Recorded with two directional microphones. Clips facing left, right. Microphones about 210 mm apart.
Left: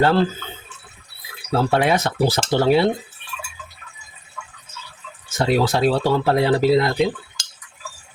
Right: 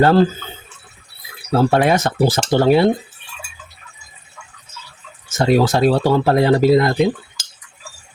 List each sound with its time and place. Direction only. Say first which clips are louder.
0.0 s speech: right 4 dB; 40° right (ahead or behind)
1.5 s speech: right 4 dB; 45° right (ahead or behind)
5.3 s speech: right 4 dB; 45° right (ahead or behind)